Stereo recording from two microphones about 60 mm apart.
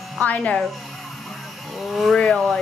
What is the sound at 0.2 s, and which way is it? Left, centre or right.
Speech, left.